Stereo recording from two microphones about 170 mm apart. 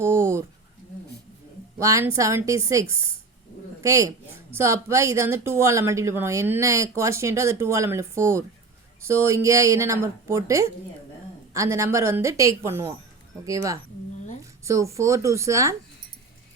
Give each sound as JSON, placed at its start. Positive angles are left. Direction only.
{"t": 0.0, "sound": "speech", "side_deg": -15}
{"t": 1.8, "sound": "a woman's voice", "side_deg": -20}